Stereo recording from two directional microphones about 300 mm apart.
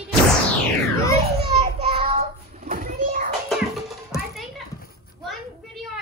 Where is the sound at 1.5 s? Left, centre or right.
Right.